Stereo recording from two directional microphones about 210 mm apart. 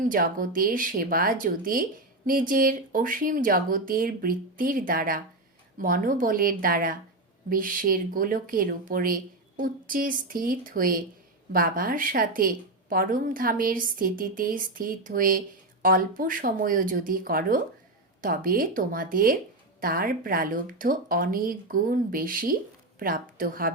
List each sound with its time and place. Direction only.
0.0 s speech: 40° right (ahead or behind)